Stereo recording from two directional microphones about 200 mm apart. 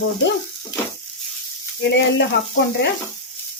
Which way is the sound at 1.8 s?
60° left (ahead or behind).